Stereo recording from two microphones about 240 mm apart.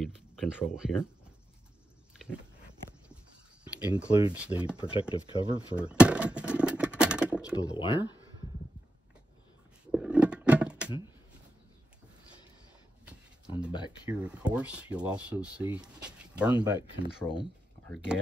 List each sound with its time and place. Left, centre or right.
0.0 s speech: centre
3.8 s speech: centre
5.1 s speech: centre
5.8 s a sound: centre
7.7 s speech: centre
9.8 s a sound: centre
13.7 s speech: centre
14.0 s speech: centre